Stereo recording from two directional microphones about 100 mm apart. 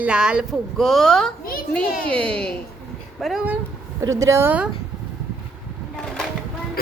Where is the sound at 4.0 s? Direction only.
30° right (ahead or behind).